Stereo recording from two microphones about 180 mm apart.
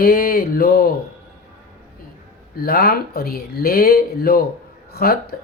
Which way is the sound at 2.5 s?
55° left (ahead or behind).